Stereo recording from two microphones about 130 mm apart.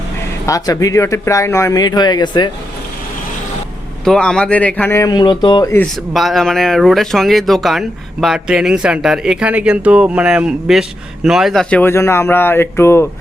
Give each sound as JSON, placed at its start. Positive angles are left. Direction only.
{"t": 0.4, "sound": "speech", "side_deg": 25}
{"t": 4.0, "sound": "speech", "side_deg": 5}
{"t": 4.9, "sound": "speech", "side_deg": 30}
{"t": 6.1, "sound": "speech", "side_deg": 0}
{"t": 11.7, "sound": "speech", "side_deg": 15}